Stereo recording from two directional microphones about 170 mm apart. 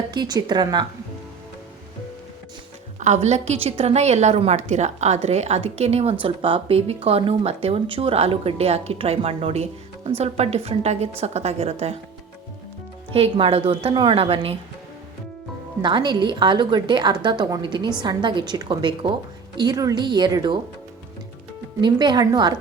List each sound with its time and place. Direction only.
0.1 s a woman's voice: 25° right (ahead or behind)
3.0 s a woman's voice: 40° right (ahead or behind)
13.1 s a woman's voice: 35° right (ahead or behind)
15.8 s a woman's voice: 25° right (ahead or behind)
21.8 s a woman's voice: 25° right (ahead or behind)